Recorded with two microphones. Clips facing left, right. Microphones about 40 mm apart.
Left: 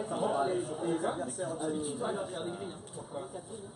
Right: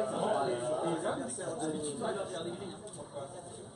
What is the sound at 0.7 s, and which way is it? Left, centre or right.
Chatter, right.